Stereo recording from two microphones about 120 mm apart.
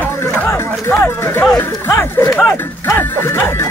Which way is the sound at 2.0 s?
20° left (ahead or behind).